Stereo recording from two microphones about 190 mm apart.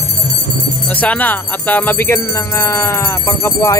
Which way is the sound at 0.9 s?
10° left (ahead or behind).